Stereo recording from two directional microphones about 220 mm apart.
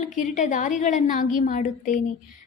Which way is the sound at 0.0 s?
35° left (ahead or behind).